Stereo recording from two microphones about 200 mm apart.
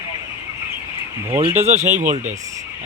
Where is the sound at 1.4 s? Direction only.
35° right (ahead or behind).